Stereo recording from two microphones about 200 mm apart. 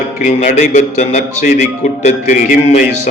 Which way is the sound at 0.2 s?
35° left (ahead or behind).